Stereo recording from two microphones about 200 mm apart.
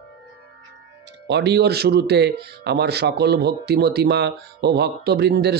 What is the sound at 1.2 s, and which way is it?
Speech, 60° right (ahead or behind).